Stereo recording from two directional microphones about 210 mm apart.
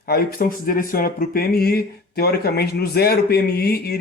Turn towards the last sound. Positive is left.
turn(degrees=50)  # may be behind; listen again after turning